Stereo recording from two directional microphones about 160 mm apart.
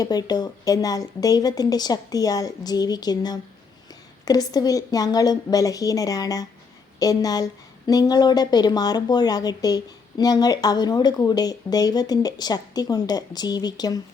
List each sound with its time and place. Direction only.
0.0 s speech: 25° left (ahead or behind)